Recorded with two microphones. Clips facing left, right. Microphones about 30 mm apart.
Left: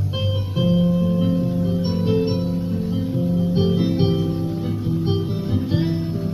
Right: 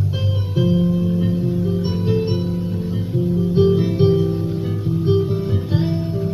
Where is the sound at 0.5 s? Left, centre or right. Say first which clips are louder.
Right 1 dB; centre.